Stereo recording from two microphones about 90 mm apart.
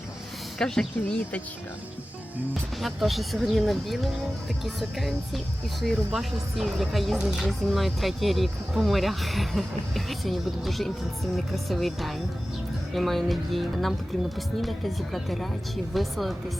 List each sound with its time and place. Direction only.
0.6 s speech: 5° left (ahead or behind)
2.8 s speech: centre (ahead or behind)